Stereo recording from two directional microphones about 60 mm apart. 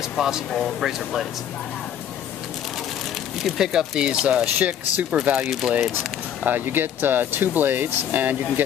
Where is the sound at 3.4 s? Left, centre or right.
Centre.